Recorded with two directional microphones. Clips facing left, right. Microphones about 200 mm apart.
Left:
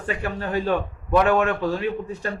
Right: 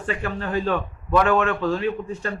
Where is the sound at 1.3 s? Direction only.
15° left (ahead or behind).